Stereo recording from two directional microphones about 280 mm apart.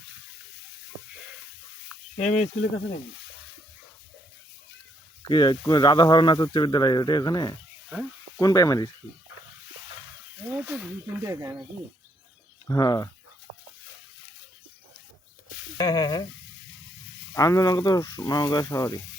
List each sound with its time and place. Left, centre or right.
2.1 s speech: left
5.3 s speech: centre
10.4 s speech: centre
12.6 s speech: centre
15.8 s speech: centre
17.3 s speech: centre